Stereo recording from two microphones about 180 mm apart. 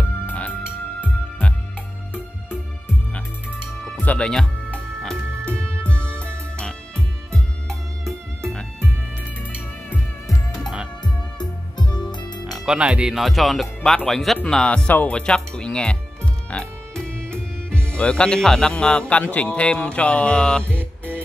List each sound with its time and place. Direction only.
0.3 s music: 10° left (ahead or behind)
3.8 s music: 5° left (ahead or behind)
6.1 s music: 15° right (ahead or behind)
7.3 s music: centre (ahead or behind)
10.2 s music: centre (ahead or behind)
11.3 s music: 25° left (ahead or behind)
12.4 s speech: centre (ahead or behind)
16.4 s music: 5° left (ahead or behind)
17.8 s speech: 5° left (ahead or behind)
20.7 s music: 10° right (ahead or behind)